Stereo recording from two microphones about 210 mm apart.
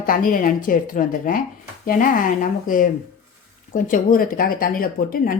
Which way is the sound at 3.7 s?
40° left (ahead or behind).